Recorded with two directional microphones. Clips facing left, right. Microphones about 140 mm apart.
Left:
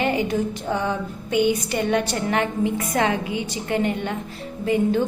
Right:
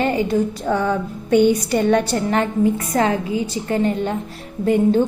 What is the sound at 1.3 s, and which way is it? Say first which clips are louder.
A woman's voice: right 6 dB; 45° right (ahead or behind).